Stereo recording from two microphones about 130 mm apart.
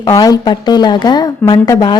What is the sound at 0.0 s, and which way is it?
A woman's voice, 30° left (ahead or behind).